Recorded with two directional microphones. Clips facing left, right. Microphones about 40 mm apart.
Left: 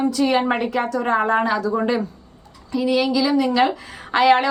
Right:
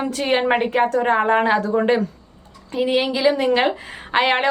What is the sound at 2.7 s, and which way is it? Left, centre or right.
A woman's voice, right.